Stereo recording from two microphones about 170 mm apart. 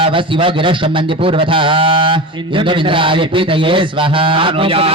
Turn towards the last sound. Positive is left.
turn(degrees=-30)  # may be behind; listen again after turning